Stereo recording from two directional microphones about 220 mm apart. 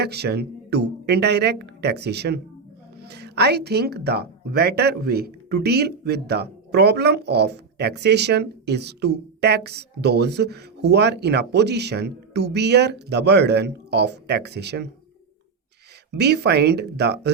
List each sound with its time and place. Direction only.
0.0 s speech: 45° right (ahead or behind)
16.1 s speech: 50° right (ahead or behind)